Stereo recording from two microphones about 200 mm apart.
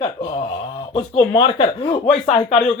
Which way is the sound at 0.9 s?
25° left (ahead or behind).